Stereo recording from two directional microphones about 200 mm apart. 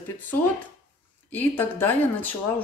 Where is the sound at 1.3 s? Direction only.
10° left (ahead or behind).